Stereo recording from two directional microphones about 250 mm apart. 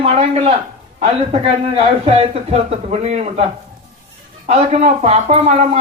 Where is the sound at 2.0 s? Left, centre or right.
Right.